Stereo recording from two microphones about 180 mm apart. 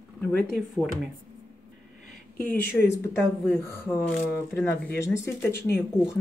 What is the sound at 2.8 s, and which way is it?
Speech, 10° left (ahead or behind).